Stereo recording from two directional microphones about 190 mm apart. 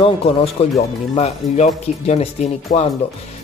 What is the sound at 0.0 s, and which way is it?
Speech, 30° left (ahead or behind).